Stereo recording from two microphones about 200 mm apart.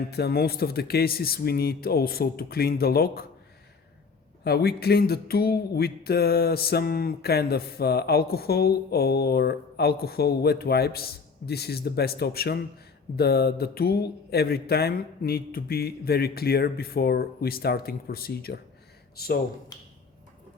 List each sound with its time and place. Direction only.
0.1 s speech: 55° left (ahead or behind)
4.4 s a man's voice: 55° left (ahead or behind)